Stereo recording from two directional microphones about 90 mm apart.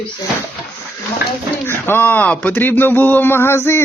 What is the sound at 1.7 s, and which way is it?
Speech, 25° left (ahead or behind).